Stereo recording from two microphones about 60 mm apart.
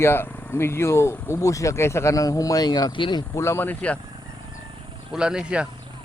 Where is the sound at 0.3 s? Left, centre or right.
Left.